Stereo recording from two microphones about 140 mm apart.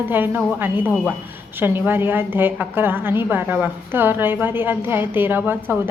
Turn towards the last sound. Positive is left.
turn(degrees=-15)  # may be behind; listen again after turning